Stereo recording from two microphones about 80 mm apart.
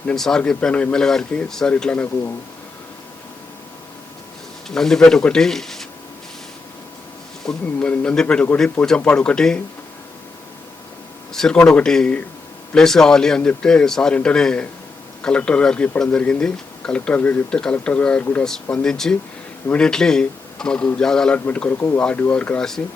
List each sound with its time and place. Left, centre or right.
0.1 s a man's voice: centre
4.7 s a man's voice: centre
7.4 s a man's voice: centre
11.3 s a man's voice: centre
21.3 s a man's voice: centre
22.0 s a man's voice: centre